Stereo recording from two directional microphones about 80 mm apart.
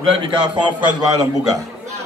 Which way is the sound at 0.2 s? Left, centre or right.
Right.